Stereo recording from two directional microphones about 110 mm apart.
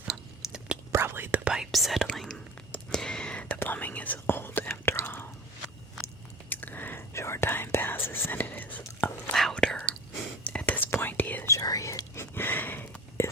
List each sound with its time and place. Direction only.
0.0 s chewing: 5° right (ahead or behind)
0.9 s whispering: 20° right (ahead or behind)
1.5 s whispering: centre (ahead or behind); by 5.3 s 20° left (ahead or behind)
6.5 s whispering: 15° left (ahead or behind)
9.3 s whispering: 5° left (ahead or behind)
11.5 s whispering: 30° left (ahead or behind)